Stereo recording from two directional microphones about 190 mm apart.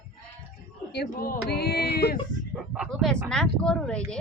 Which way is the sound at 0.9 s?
55° left (ahead or behind).